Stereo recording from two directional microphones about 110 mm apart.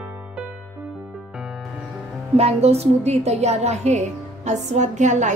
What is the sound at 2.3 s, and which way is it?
A woman's voice, 70° right (ahead or behind).